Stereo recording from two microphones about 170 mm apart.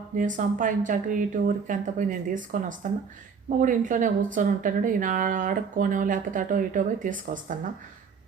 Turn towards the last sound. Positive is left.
turn(degrees=-50)  # may be behind; listen again after turning